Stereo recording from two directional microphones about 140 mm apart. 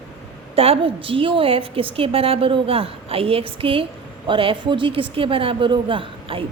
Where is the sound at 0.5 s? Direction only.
45° right (ahead or behind).